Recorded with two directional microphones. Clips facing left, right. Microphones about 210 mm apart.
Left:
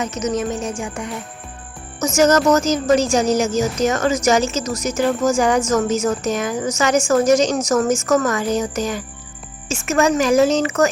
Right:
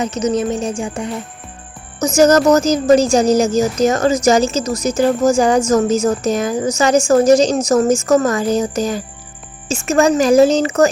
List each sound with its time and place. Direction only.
0.0 s a woman's voice: 30° right (ahead or behind)